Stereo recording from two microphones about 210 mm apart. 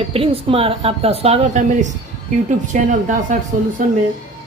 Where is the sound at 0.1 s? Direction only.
25° right (ahead or behind).